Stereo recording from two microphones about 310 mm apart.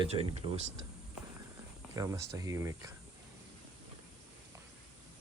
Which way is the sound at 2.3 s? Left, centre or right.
Centre.